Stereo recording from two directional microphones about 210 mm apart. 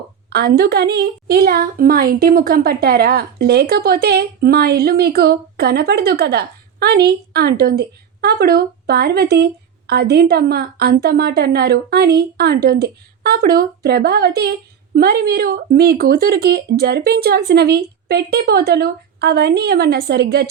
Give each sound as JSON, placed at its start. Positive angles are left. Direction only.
{"t": 0.3, "sound": "a woman's voice", "side_deg": -50}